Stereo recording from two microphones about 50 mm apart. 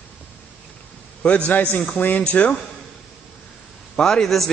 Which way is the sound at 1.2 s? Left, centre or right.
Left.